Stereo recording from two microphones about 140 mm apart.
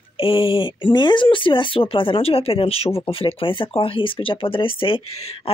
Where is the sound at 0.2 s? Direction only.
40° left (ahead or behind).